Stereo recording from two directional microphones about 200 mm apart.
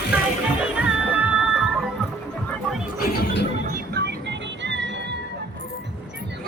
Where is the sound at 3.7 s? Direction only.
55° right (ahead or behind).